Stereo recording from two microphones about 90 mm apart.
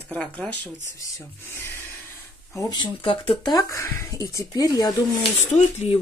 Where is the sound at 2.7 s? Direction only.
65° left (ahead or behind).